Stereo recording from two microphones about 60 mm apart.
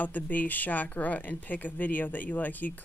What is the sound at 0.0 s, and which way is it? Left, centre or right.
Speech, left.